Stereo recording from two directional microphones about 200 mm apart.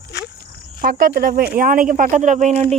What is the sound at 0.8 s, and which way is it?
Speech, 50° right (ahead or behind).